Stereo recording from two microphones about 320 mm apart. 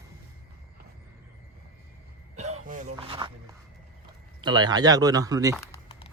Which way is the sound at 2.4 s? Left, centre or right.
Right.